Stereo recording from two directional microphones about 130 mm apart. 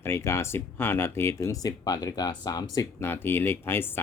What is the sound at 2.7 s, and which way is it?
Speech, 20° left (ahead or behind).